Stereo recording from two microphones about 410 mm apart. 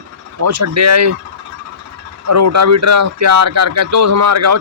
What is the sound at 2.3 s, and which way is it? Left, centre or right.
Speech, right.